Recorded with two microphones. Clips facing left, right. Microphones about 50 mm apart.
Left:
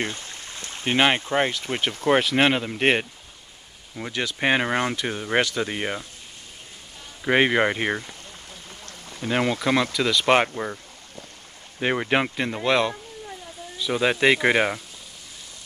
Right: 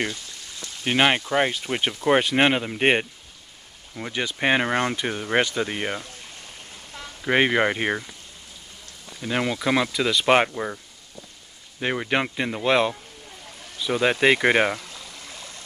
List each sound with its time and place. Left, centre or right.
0.1 s a sound: left
0.9 s speech: centre
1.4 s speech: centre
2.0 s speech: centre
4.1 s speech: centre
4.4 s speech: centre
7.2 s speech: centre
9.2 s speech: centre
9.6 s speech: centre
11.8 s speech: centre
12.4 s speech: centre